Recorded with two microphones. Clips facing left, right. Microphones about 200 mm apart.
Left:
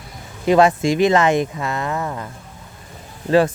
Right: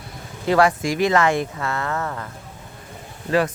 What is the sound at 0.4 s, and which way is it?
Speech, 20° left (ahead or behind).